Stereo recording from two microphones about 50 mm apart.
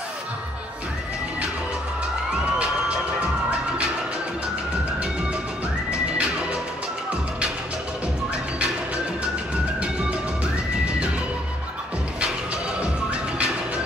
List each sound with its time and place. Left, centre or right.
5.9 s music: right
10.4 s music: right
12.8 s music: right